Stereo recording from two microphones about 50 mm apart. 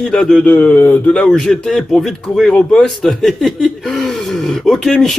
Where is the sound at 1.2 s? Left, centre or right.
Centre.